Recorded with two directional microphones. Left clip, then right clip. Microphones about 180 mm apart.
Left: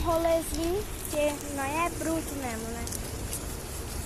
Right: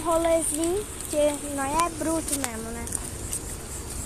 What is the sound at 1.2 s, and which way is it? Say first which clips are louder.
Speech: right 4 dB; 60° right (ahead or behind).